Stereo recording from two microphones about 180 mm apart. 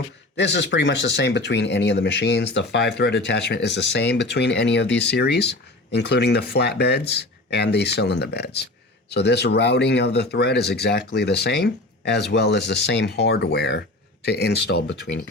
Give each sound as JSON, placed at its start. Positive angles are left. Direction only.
{"t": 0.3, "sound": "speech", "side_deg": 75}